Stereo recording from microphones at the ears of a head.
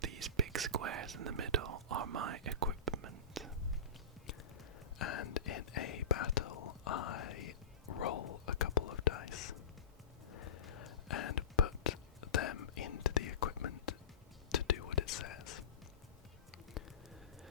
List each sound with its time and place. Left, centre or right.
0.0 s whispering: right
4.9 s whispering: left